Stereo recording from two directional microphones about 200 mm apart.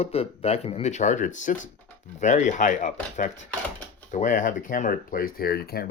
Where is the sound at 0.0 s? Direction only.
30° left (ahead or behind).